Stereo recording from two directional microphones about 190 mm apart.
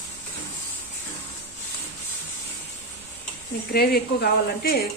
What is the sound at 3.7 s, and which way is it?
Speech, 55° left (ahead or behind).